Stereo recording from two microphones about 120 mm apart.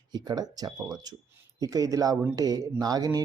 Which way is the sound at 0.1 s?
35° right (ahead or behind).